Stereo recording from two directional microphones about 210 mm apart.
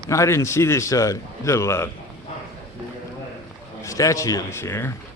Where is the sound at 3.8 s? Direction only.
15° left (ahead or behind).